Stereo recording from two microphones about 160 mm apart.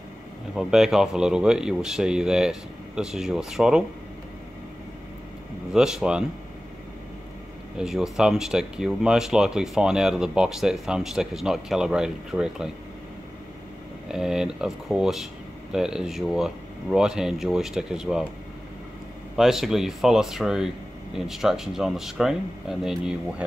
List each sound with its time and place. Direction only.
0.6 s speech: 5° right (ahead or behind)
5.7 s speech: 5° right (ahead or behind)
7.7 s speech: 5° right (ahead or behind)
14.0 s speech: 5° right (ahead or behind)
19.3 s speech: centre (ahead or behind)